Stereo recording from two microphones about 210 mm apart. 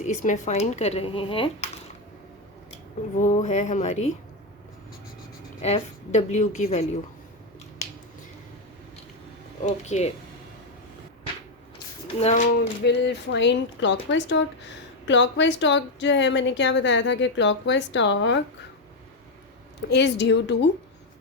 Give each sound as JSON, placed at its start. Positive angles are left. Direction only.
{"t": 0.0, "sound": "speech", "side_deg": 35}
{"t": 3.2, "sound": "speech", "side_deg": 35}
{"t": 5.6, "sound": "speech", "side_deg": 30}
{"t": 9.6, "sound": "speech", "side_deg": 35}
{"t": 12.2, "sound": "speech", "side_deg": 35}
{"t": 12.8, "sound": "speech", "side_deg": 55}
{"t": 19.9, "sound": "speech", "side_deg": 55}